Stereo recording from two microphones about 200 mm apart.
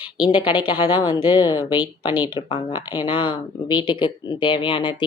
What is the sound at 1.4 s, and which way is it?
Speech, 20° left (ahead or behind).